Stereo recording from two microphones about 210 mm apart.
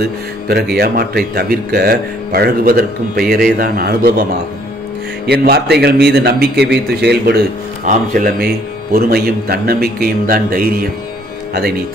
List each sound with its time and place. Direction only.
0.7 s speech: 45° right (ahead or behind)